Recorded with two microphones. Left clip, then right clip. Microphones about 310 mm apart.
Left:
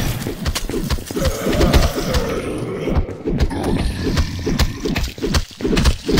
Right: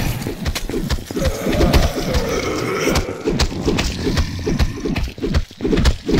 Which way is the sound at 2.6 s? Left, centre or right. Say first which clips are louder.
Right 5 dB; right.